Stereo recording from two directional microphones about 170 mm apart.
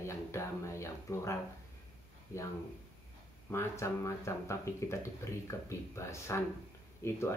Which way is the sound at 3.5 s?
15° left (ahead or behind).